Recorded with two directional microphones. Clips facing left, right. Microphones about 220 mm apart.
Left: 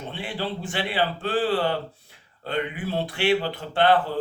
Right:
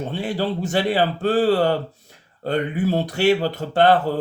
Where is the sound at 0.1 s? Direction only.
40° right (ahead or behind).